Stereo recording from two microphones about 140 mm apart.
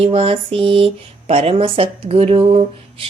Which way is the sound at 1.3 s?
45° right (ahead or behind).